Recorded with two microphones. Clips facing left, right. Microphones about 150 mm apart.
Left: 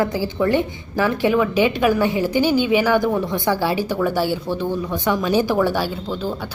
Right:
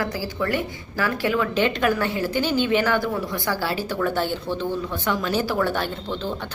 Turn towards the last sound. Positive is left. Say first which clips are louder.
# left 3 dB
turn(degrees=10)  # may be behind; listen again after turning